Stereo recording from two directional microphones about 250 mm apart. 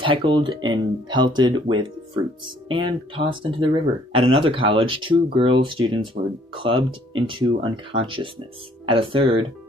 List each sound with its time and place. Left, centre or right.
0.0 s speech: centre